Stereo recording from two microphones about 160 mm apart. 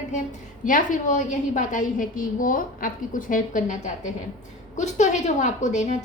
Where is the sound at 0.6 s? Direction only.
55° left (ahead or behind).